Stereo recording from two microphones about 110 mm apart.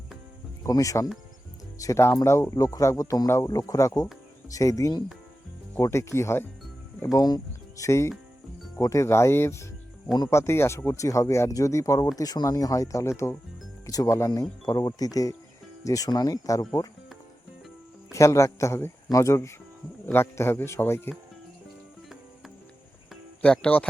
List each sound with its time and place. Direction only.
0.6 s speech: 30° left (ahead or behind)
5.7 s speech: 25° left (ahead or behind)
7.0 s speech: 35° left (ahead or behind)
7.9 s speech: 25° left (ahead or behind)
18.1 s speech: 25° left (ahead or behind)
23.4 s speech: 10° left (ahead or behind)